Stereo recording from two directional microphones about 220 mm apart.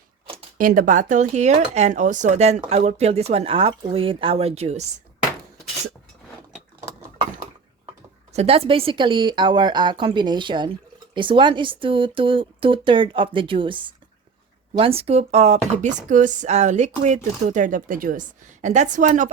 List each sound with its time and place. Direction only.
0.6 s speech: 40° right (ahead or behind)
8.3 s speech: 30° right (ahead or behind)